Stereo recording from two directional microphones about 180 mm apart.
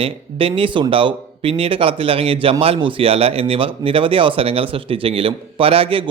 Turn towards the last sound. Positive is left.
turn(degrees=-30)  # may be behind; listen again after turning